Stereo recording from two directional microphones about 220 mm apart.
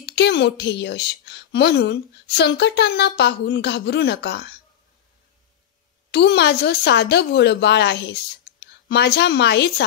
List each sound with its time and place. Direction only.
0.0 s a woman's voice: 50° left (ahead or behind)
6.1 s a woman's voice: 50° left (ahead or behind)